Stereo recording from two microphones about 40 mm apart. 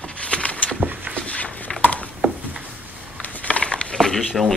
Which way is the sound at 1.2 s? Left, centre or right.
Left.